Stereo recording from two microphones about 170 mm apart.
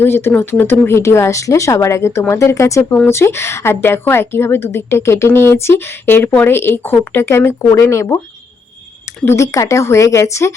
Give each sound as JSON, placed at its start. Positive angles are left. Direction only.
{"t": 0.0, "sound": "speech", "side_deg": 15}
{"t": 9.2, "sound": "speech", "side_deg": 15}